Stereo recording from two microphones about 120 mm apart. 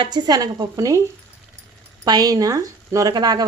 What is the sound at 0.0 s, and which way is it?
Speech, 35° right (ahead or behind).